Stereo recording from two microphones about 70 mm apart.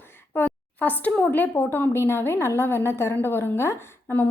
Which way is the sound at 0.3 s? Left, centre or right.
Left.